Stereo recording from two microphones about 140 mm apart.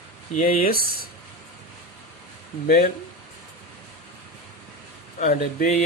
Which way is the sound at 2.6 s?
90° left.